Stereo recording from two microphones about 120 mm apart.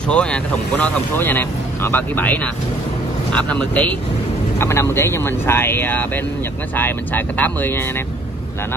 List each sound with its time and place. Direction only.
0.1 s speech: 10° left (ahead or behind)
4.6 s speech: 20° left (ahead or behind)